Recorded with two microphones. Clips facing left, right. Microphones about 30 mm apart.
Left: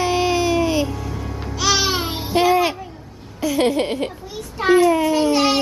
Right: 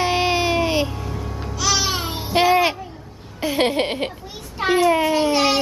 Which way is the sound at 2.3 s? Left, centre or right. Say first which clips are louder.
Even; centre.